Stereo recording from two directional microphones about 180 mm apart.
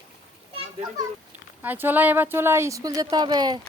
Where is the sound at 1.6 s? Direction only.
10° right (ahead or behind).